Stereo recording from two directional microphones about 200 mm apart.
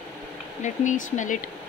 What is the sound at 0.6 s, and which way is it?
Speech, 40° left (ahead or behind).